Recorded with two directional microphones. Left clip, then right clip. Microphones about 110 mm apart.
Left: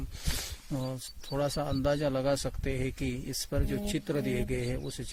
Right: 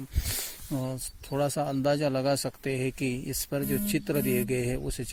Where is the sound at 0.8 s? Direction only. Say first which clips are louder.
Right 1 dB; 20° right (ahead or behind).